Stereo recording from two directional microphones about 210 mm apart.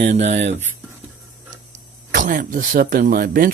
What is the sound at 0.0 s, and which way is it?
Speech, 30° right (ahead or behind).